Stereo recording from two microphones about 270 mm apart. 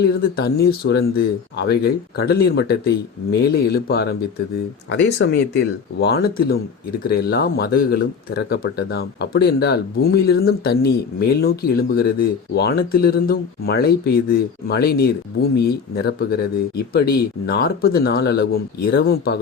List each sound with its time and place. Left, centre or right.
0.0 s speech: left